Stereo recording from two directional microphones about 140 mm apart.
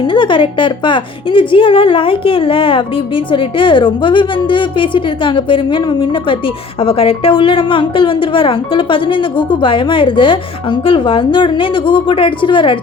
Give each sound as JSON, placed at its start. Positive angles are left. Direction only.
{"t": 0.1, "sound": "speech", "side_deg": 35}